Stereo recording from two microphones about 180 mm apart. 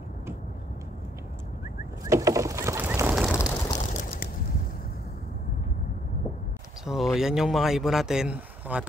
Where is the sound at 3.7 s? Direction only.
45° left (ahead or behind).